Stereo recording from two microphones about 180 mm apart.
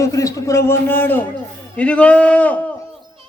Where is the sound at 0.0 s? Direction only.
20° left (ahead or behind).